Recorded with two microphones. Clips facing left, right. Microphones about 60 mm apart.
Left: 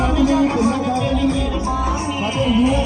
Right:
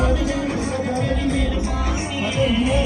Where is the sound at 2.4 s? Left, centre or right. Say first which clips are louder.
Left 3 dB; right.